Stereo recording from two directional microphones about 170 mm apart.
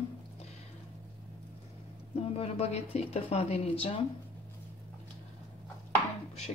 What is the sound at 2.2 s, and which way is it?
A woman's voice, 35° left (ahead or behind).